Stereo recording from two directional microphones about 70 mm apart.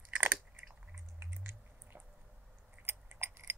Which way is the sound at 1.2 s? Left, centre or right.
Right.